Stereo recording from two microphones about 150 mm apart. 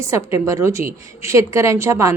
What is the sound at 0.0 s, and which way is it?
A woman's voice, 20° right (ahead or behind).